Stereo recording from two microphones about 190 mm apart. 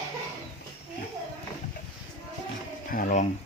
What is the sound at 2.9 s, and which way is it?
Speech, 45° left (ahead or behind).